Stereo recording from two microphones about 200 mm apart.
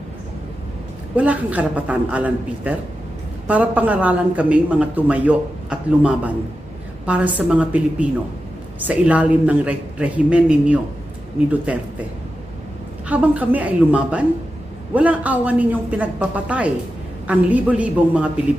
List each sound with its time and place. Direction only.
1.1 s speech: 5° right (ahead or behind)
13.1 s speech: 5° right (ahead or behind)